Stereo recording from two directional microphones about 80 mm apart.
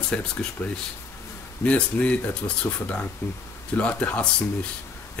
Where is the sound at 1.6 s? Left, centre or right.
Centre.